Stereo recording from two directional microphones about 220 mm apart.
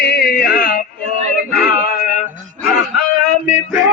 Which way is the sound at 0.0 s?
45° left (ahead or behind).